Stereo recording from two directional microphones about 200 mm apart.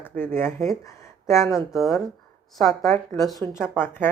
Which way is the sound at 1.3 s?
15° left (ahead or behind).